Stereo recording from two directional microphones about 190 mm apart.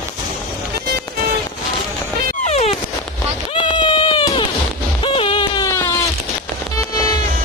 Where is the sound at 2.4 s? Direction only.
35° left (ahead or behind); by 5.9 s 15° left (ahead or behind).